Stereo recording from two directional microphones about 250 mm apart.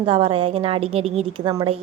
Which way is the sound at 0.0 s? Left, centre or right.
Right.